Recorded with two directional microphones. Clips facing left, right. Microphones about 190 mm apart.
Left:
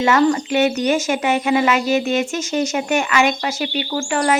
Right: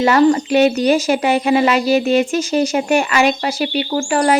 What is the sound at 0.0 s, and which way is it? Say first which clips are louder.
Speech: right 3 dB; 35° right (ahead or behind).